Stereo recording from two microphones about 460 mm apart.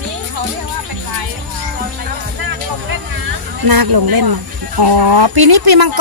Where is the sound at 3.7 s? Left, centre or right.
Right.